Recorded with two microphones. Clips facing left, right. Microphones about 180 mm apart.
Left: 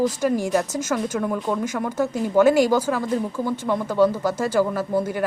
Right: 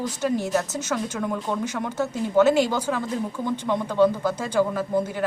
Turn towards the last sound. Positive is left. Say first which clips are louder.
# left 2 dB
turn(degrees=10)  # may be behind; listen again after turning